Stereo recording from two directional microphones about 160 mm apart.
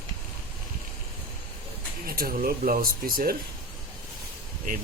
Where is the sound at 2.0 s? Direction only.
70° right (ahead or behind).